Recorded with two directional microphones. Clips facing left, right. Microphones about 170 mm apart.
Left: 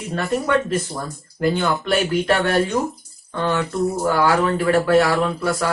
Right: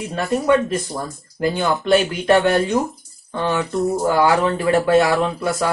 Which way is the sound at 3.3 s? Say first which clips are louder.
Right 1 dB; 15° right (ahead or behind).